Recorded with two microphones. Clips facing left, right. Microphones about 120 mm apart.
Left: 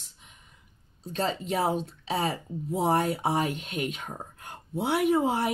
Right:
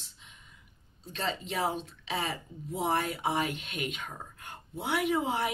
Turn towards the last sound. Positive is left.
turn(degrees=45)  # may be behind; listen again after turning